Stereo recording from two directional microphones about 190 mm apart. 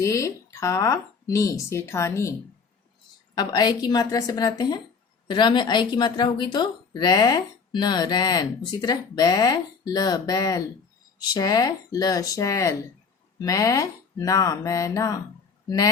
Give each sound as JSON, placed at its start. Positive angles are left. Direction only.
{"t": 0.0, "sound": "speech", "side_deg": 15}
{"t": 3.3, "sound": "a woman's voice", "side_deg": 20}